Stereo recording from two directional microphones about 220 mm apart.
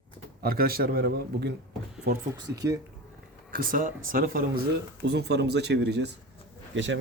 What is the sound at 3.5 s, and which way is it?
Speech, 40° right (ahead or behind).